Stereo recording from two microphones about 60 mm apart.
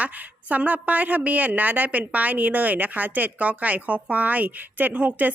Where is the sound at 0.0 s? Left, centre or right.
Right.